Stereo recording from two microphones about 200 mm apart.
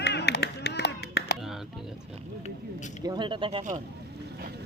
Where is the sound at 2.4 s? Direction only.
35° left (ahead or behind).